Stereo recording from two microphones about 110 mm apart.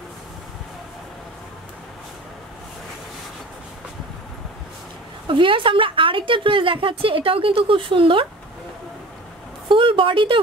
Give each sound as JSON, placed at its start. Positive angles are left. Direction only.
{"t": 5.3, "sound": "a woman's voice", "side_deg": -50}
{"t": 9.7, "sound": "a woman's voice", "side_deg": -50}